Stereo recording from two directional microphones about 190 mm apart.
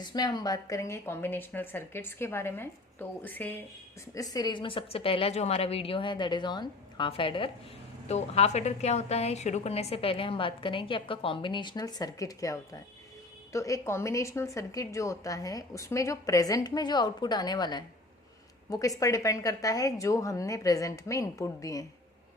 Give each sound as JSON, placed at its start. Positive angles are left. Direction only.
{"t": 0.0, "sound": "a woman's voice", "side_deg": 20}